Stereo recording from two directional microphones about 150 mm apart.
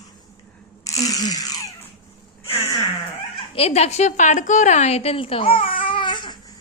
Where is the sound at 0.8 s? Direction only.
20° left (ahead or behind).